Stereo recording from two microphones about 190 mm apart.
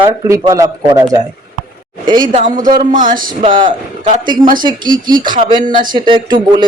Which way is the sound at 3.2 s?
25° right (ahead or behind).